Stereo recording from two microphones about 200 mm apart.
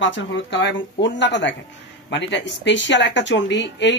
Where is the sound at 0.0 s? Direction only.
65° left (ahead or behind).